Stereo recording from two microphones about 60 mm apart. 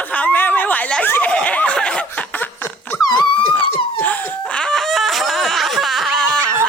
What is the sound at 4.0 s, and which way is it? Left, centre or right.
Laughter, left.